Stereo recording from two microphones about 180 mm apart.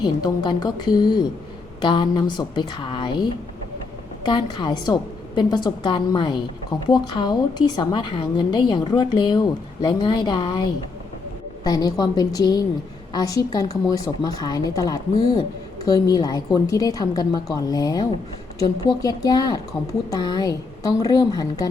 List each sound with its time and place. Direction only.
0.0 s a woman's voice: 25° left (ahead or behind)